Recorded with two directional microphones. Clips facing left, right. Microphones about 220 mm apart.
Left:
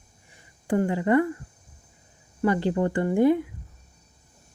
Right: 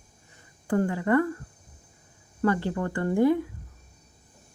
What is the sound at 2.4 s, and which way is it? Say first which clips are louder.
Speech: left 3 dB; 20° left (ahead or behind).